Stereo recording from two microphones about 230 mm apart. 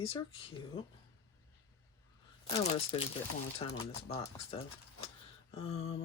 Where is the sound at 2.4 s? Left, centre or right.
Left.